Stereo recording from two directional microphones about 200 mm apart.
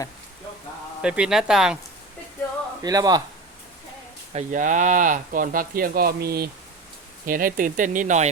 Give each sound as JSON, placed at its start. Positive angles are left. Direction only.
{"t": 1.0, "sound": "speech", "side_deg": -5}
{"t": 2.8, "sound": "speech", "side_deg": -20}
{"t": 4.3, "sound": "speech", "side_deg": -35}